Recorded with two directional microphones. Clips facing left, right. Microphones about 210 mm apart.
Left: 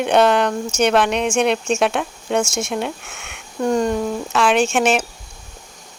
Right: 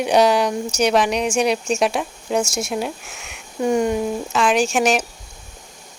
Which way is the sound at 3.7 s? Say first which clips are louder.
Even; 10° right (ahead or behind).